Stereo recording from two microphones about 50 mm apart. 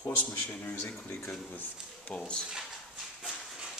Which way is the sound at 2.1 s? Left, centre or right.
Centre.